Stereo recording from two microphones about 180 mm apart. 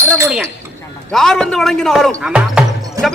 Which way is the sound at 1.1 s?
5° left (ahead or behind).